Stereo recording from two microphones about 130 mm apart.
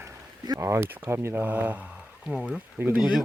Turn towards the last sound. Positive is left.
turn(degrees=-5)  # may be behind; listen again after turning